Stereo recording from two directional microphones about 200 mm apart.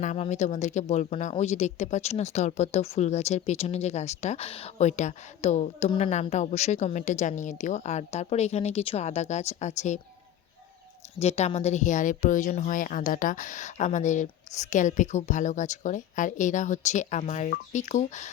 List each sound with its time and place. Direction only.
0.0 s speech: 35° left (ahead or behind)
11.2 s speech: 30° left (ahead or behind)